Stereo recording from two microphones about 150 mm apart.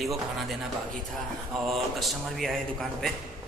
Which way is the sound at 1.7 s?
Centre (ahead or behind).